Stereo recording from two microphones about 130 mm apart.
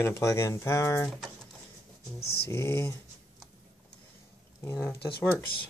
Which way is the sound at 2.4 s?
20° left (ahead or behind).